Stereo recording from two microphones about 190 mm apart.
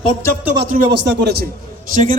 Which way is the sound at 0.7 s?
45° right (ahead or behind).